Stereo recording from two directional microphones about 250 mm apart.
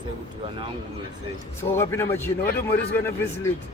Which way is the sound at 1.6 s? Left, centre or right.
Centre.